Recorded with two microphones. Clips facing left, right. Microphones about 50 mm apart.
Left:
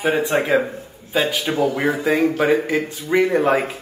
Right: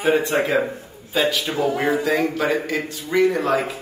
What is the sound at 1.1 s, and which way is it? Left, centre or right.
Speech, left.